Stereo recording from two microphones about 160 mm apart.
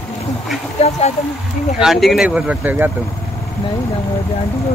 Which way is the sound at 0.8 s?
40° left (ahead or behind).